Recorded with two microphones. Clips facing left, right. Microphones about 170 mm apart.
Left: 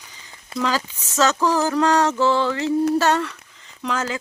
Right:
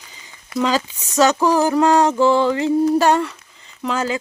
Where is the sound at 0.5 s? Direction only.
30° left (ahead or behind).